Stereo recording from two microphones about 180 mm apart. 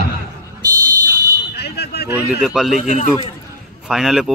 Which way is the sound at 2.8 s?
45° left (ahead or behind).